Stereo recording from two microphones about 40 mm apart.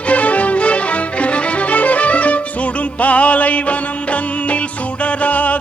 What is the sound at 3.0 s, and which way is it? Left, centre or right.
Music, left.